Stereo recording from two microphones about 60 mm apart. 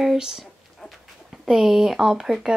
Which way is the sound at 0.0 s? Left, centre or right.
Centre.